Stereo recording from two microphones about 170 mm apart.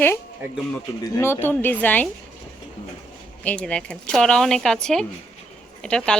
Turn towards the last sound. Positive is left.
turn(degrees=5)  # may be behind; listen again after turning